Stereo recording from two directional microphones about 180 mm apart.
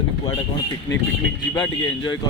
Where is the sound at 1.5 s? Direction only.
25° left (ahead or behind).